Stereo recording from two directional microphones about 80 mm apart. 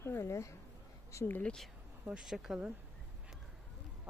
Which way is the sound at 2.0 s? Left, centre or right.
Centre.